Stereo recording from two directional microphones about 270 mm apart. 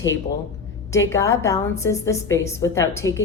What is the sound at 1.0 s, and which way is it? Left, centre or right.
A woman's voice, centre.